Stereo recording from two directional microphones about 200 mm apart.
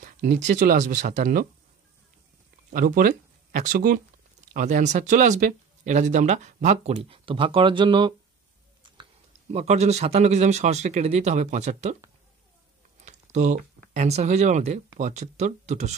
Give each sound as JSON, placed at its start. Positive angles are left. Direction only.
{"t": 0.0, "sound": "speech", "side_deg": -40}
{"t": 2.7, "sound": "speech", "side_deg": -45}
{"t": 9.5, "sound": "speech", "side_deg": -35}
{"t": 13.0, "sound": "speech", "side_deg": -35}